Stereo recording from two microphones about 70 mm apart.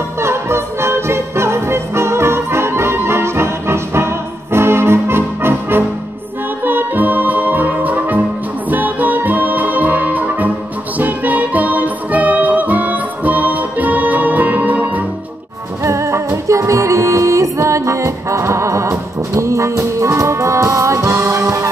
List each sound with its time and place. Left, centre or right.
0.2 s music: right
15.8 s music: right